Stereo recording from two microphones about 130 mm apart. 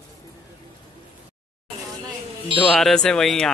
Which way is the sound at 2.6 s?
Centre (ahead or behind).